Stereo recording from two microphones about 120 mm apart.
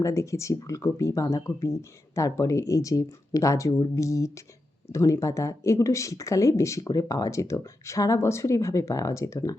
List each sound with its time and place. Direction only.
0.0 s speech: 25° left (ahead or behind)